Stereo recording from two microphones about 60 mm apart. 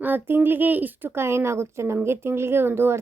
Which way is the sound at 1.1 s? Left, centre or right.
Right.